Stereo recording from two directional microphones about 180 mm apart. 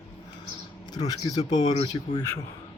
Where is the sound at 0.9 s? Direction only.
20° left (ahead or behind).